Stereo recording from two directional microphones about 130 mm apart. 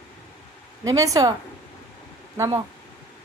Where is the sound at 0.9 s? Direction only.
25° right (ahead or behind).